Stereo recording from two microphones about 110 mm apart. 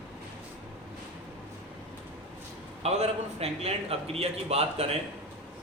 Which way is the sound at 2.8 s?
80° right.